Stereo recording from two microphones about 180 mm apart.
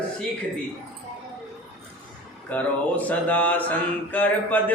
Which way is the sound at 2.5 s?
10° left (ahead or behind).